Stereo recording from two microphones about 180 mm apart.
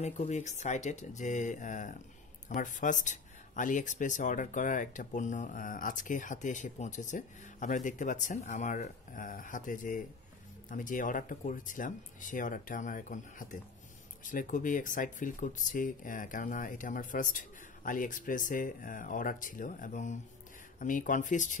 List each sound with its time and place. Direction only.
0.0 s speech: 40° left (ahead or behind)